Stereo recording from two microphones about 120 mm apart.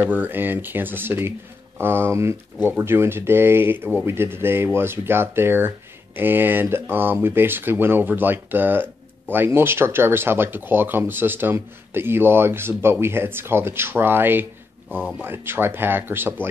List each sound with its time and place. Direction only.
0.0 s speech: 15° right (ahead or behind)